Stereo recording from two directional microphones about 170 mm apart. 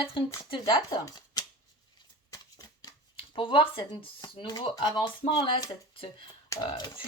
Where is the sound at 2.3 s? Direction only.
20° left (ahead or behind).